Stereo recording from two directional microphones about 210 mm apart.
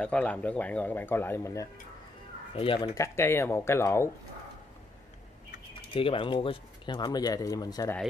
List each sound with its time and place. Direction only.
0.0 s speech: 5° left (ahead or behind)
2.5 s speech: 25° left (ahead or behind)
5.9 s speech: 25° left (ahead or behind)